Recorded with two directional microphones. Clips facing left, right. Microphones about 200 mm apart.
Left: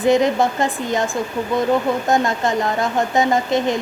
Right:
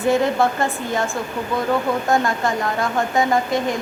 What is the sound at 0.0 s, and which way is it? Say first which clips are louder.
A woman's voice: left 2 dB; 20° left (ahead or behind).